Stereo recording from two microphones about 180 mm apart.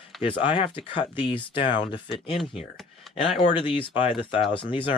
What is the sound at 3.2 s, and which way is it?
Speech, 40° left (ahead or behind).